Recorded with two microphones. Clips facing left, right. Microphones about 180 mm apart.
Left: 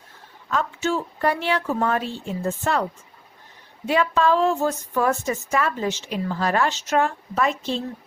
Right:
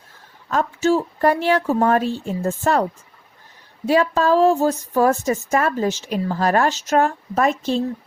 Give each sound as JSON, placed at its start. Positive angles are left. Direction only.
{"t": 0.4, "sound": "a woman's voice", "side_deg": -40}
{"t": 3.8, "sound": "a woman's voice", "side_deg": -40}